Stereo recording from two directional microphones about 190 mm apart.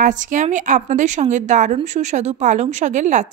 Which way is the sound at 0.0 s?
40° right (ahead or behind).